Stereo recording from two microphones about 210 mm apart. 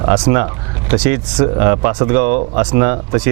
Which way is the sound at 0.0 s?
25° right (ahead or behind).